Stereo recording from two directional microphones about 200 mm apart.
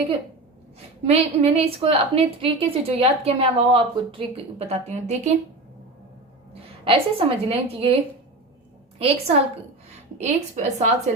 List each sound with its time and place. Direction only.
1.0 s a woman's voice: 30° right (ahead or behind)
6.5 s a woman's voice: 25° right (ahead or behind)
9.0 s a woman's voice: 30° right (ahead or behind)
10.2 s a woman's voice: 35° right (ahead or behind)